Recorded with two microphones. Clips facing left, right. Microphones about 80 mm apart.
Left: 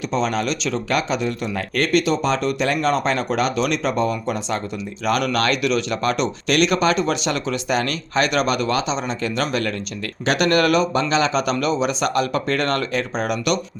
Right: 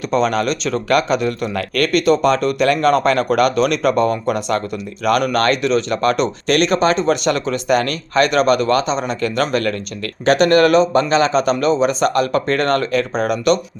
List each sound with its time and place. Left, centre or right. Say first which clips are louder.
0.1 s speech: right 6 dB; right
5.0 s speech: right 4 dB; right
10.3 s speech: right 5 dB; right